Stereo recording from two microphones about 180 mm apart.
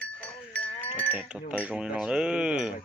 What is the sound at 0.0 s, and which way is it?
Livestock, 5° left (ahead or behind).